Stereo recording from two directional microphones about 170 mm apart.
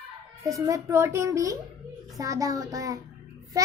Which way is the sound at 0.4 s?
20° right (ahead or behind).